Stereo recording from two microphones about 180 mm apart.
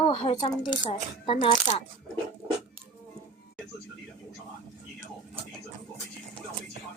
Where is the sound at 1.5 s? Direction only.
40° left (ahead or behind).